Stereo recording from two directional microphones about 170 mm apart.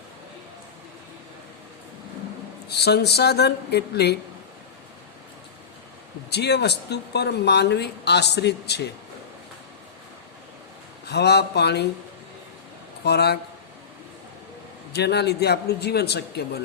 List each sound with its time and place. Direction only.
2.6 s a man's voice: 75° left (ahead or behind)
6.3 s speech: 80° left
11.0 s a man's voice: 75° left (ahead or behind)
13.1 s a man's voice: 70° left (ahead or behind)
14.9 s a man's voice: 80° left